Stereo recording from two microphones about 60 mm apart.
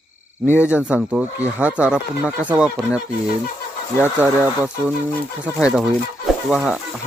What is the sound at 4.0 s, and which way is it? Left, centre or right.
Speech, right.